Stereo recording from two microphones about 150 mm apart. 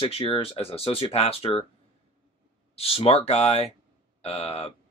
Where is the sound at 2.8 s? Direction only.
40° left (ahead or behind).